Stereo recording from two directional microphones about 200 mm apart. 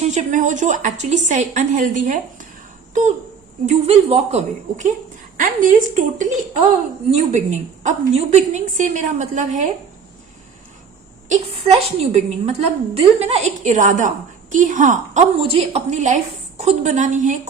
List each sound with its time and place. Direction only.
0.0 s a woman's voice: 35° right (ahead or behind)
3.7 s a woman's voice: 30° right (ahead or behind)
11.3 s a woman's voice: 30° right (ahead or behind)